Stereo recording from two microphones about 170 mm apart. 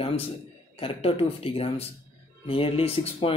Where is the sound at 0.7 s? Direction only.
35° left (ahead or behind).